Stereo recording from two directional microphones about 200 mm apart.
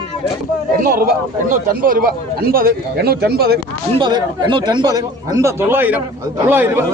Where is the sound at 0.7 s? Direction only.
45° right (ahead or behind).